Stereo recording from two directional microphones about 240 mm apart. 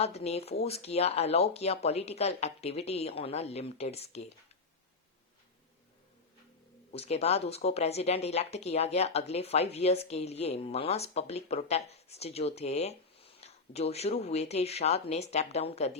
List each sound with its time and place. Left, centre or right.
0.0 s speech: left
6.9 s speech: left